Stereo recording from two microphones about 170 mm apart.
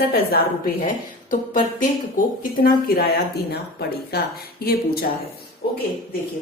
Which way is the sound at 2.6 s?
70° left (ahead or behind).